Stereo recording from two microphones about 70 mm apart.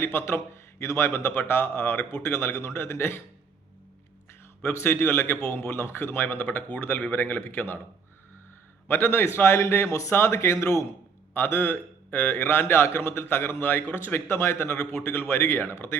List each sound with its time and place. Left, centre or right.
0.3 s a man's voice: left
1.1 s a man's voice: left
4.7 s a man's voice: left
8.9 s a man's voice: left
11.3 s a man's voice: left